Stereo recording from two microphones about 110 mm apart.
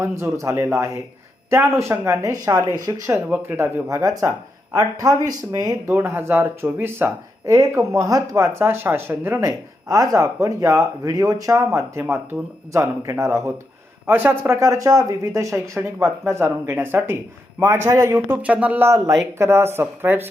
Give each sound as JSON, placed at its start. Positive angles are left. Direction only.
{"t": 0.0, "sound": "speech", "side_deg": -25}
{"t": 3.1, "sound": "speech", "side_deg": -15}
{"t": 3.8, "sound": "speech", "side_deg": -30}
{"t": 5.9, "sound": "speech", "side_deg": -20}
{"t": 18.4, "sound": "speech", "side_deg": -15}